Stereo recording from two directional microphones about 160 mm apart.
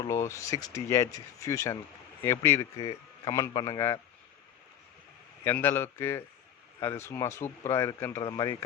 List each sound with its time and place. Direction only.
0.0 s a man's voice: 20° left (ahead or behind)
5.5 s a man's voice: 15° left (ahead or behind)
8.2 s speech: 25° left (ahead or behind)